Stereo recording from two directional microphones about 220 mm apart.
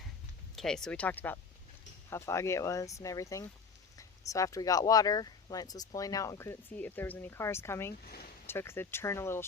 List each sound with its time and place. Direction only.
0.5 s speech: centre (ahead or behind)
8.0 s speech: 45° left (ahead or behind)
8.4 s speech: 10° left (ahead or behind)